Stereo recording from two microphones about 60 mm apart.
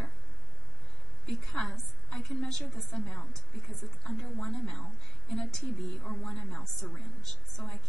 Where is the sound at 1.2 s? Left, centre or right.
Centre.